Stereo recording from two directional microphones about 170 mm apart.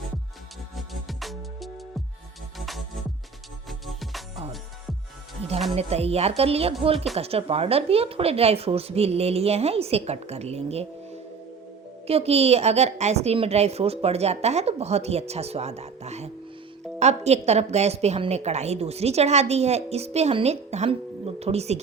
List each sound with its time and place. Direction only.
0.8 s music: centre (ahead or behind)
5.4 s music: 40° right (ahead or behind)
5.7 s a woman's voice: 35° right (ahead or behind)
12.0 s a woman's voice: 35° right (ahead or behind)